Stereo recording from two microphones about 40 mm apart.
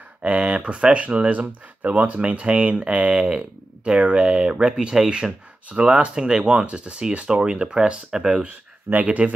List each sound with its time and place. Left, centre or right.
0.2 s speech: right
9.0 s speech: right